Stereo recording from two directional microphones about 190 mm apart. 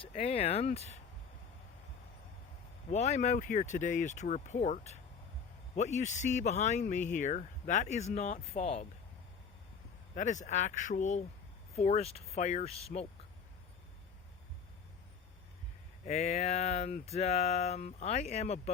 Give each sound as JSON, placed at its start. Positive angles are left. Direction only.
{"t": 0.0, "sound": "speech", "side_deg": 30}
{"t": 2.9, "sound": "speech", "side_deg": 35}
{"t": 10.2, "sound": "speech", "side_deg": 40}
{"t": 16.0, "sound": "speech", "side_deg": 35}